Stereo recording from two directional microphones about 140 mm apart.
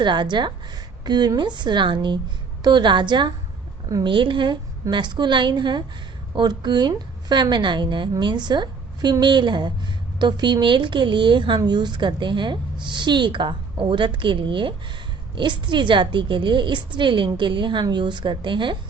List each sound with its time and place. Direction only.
0.0 s speech: 35° right (ahead or behind)
4.1 s speech: 35° right (ahead or behind)